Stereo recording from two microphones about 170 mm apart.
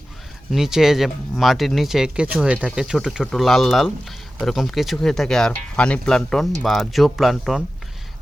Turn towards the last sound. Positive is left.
turn(degrees=0)  # may be behind; listen again after turning